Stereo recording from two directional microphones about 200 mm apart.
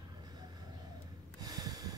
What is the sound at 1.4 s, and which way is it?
Snort, 20° right (ahead or behind).